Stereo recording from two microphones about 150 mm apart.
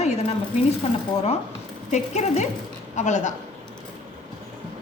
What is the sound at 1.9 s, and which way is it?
Speech, 50° left (ahead or behind).